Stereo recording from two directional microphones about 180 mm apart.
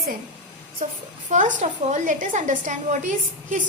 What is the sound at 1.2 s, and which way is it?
A woman's voice, 45° right (ahead or behind).